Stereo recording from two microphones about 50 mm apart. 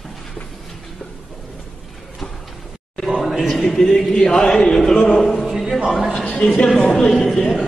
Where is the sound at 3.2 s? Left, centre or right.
Centre.